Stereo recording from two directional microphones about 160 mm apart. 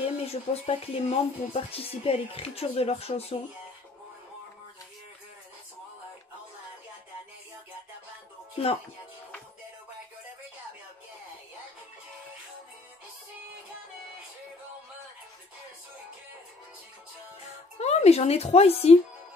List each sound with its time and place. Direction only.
0.0 s speech: 40° left (ahead or behind)
17.7 s speech: 45° left (ahead or behind)